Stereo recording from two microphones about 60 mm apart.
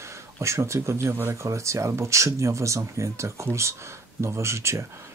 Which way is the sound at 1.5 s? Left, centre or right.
Right.